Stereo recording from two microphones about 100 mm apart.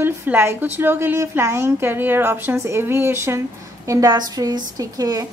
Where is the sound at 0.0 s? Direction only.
20° right (ahead or behind).